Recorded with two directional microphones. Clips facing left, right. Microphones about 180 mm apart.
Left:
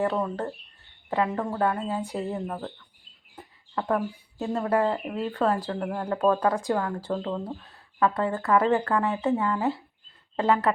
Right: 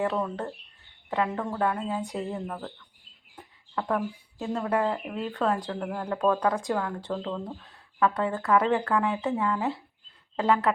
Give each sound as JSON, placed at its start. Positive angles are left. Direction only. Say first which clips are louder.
{"t": 0.0, "sound": "speech", "louder": "left 2 dB", "side_deg": 0}
{"t": 2.5, "sound": "speech", "louder": "left 2 dB", "side_deg": 20}
{"t": 3.3, "sound": "speech", "louder": "left 1 dB", "side_deg": 0}